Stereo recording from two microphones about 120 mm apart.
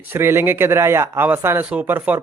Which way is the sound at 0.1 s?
20° right (ahead or behind).